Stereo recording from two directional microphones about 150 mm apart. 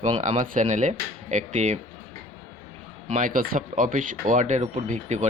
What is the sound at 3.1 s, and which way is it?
Speech, 65° right (ahead or behind).